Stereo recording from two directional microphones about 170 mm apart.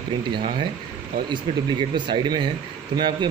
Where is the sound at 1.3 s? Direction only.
25° right (ahead or behind).